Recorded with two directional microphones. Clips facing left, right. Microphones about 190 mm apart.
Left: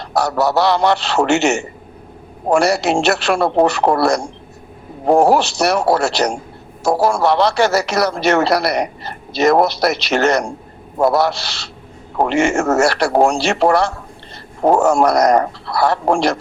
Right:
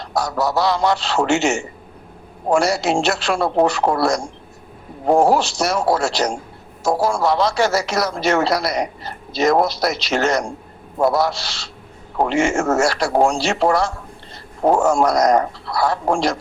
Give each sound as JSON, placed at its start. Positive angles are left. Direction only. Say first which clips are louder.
{"t": 0.0, "sound": "a man's voice", "louder": "left 4 dB", "side_deg": 65}